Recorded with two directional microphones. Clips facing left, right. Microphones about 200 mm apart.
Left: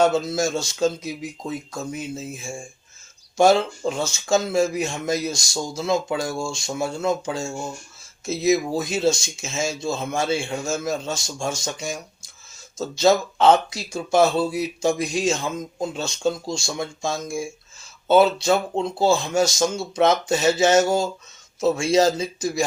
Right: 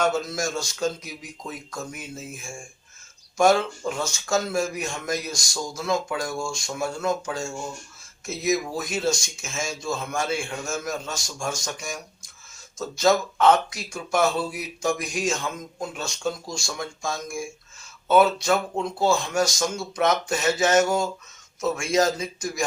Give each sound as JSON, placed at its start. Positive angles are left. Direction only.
{"t": 0.0, "sound": "speech", "side_deg": 25}
{"t": 18.4, "sound": "speech", "side_deg": 30}